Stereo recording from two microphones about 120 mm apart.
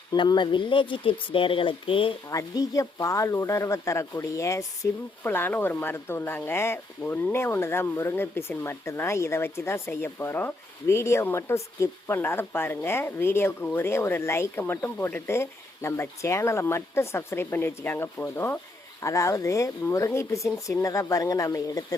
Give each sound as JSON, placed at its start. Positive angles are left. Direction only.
{"t": 0.1, "sound": "speech", "side_deg": 35}
{"t": 2.3, "sound": "speech", "side_deg": 25}
{"t": 19.0, "sound": "speech", "side_deg": 25}